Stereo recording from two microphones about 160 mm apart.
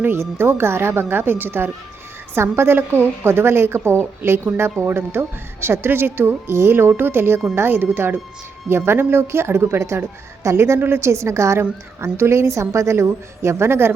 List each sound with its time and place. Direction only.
0.0 s a woman's voice: 15° right (ahead or behind)